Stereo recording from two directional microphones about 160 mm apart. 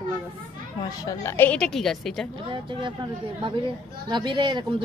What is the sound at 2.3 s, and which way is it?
Speech, 30° right (ahead or behind).